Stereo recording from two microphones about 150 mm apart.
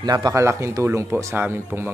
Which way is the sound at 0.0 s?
25° right (ahead or behind).